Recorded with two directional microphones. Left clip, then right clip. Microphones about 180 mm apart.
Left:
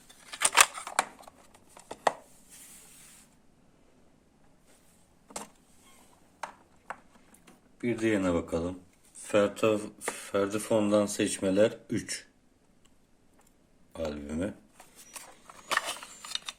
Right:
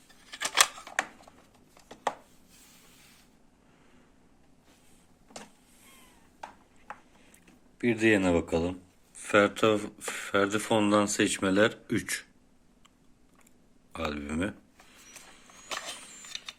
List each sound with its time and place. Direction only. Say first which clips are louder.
0.4 s scissors: left 2 dB; 5° left (ahead or behind)
1.7 s chopping: left 4 dB; centre (ahead or behind)
7.8 s speech: right 4 dB; 20° right (ahead or behind); by 12.2 s centre (ahead or behind)
13.9 s speech: right 1 dB; centre (ahead or behind)
15.1 s a sound: left 4 dB; centre (ahead or behind)